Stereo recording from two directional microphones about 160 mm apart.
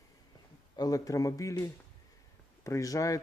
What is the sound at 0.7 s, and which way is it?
Speech, 25° left (ahead or behind).